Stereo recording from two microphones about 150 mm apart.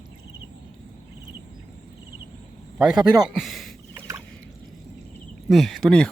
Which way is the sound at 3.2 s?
Centre (ahead or behind).